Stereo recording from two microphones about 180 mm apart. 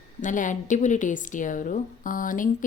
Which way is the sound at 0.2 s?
45° left (ahead or behind).